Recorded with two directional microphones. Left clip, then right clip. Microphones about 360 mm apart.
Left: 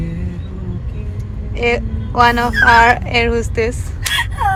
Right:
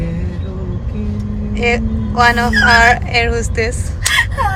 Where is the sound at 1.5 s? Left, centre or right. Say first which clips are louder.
Right 1 dB; centre.